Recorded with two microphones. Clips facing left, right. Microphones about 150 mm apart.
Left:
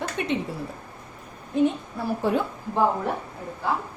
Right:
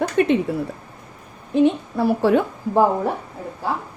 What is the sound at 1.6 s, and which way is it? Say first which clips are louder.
Speech: right 7 dB; 80° right.